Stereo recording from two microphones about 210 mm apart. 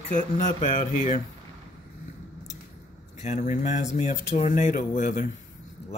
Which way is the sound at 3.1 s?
35° left (ahead or behind).